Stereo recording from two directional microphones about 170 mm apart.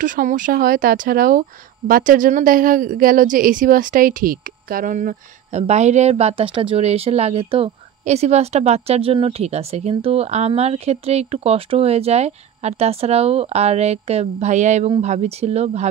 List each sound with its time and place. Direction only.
0.0 s a woman's voice: 50° right (ahead or behind)